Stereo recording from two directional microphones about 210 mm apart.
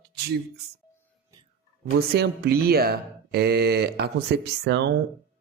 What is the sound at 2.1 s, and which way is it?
Speech, 50° right (ahead or behind).